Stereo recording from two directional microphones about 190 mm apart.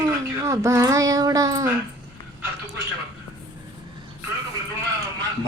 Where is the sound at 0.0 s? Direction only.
15° right (ahead or behind).